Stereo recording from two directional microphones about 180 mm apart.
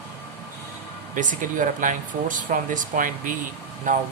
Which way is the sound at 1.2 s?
45° right (ahead or behind).